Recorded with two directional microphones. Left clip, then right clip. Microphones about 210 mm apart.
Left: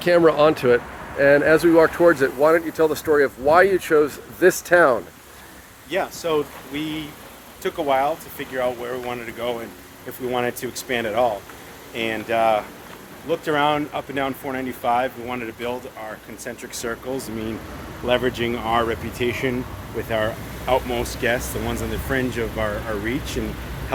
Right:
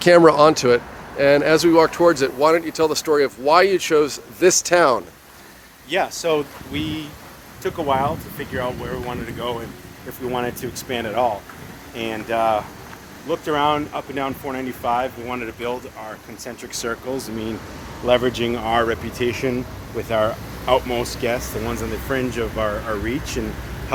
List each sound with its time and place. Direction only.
0.0 s speech: 35° right (ahead or behind); by 5.0 s 5° right (ahead or behind)
5.9 s speech: 55° right (ahead or behind)
6.7 s speech: 30° right (ahead or behind)
7.6 s speech: 10° left (ahead or behind)
16.4 s speech: 15° right (ahead or behind)
18.0 s speech: 30° right (ahead or behind); by 23.4 s 10° right (ahead or behind)